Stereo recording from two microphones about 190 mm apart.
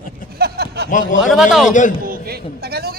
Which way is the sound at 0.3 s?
55° right (ahead or behind).